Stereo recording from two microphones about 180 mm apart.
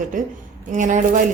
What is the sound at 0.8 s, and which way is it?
Speech, 45° right (ahead or behind).